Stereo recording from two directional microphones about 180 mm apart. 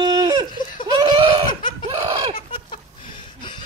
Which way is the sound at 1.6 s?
25° left (ahead or behind).